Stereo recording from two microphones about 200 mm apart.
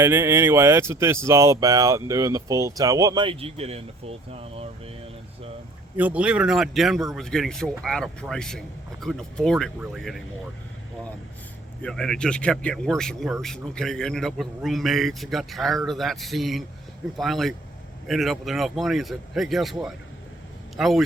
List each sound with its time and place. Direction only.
0.0 s speech: 10° right (ahead or behind); by 4.7 s 30° right (ahead or behind)
6.0 s speech: 5° right (ahead or behind)
11.8 s speech: 5° left (ahead or behind)